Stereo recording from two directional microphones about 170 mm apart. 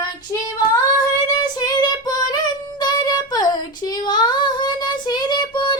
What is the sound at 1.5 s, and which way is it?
Child singing, 25° left (ahead or behind).